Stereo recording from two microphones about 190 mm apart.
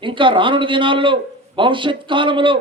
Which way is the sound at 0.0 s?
25° right (ahead or behind).